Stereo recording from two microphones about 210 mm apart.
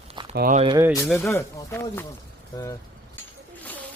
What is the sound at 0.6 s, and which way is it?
Speech, 20° right (ahead or behind).